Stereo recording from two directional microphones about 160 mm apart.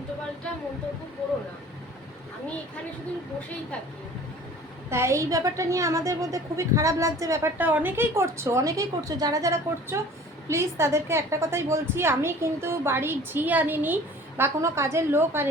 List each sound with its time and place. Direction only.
4.9 s a woman's voice: 15° right (ahead or behind)